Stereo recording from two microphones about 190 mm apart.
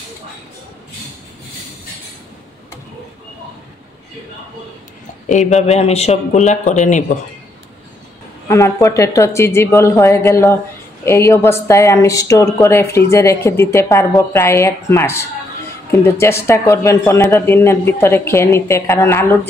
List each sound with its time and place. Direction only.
5.3 s speech: 40° left (ahead or behind)
8.5 s speech: 15° left (ahead or behind)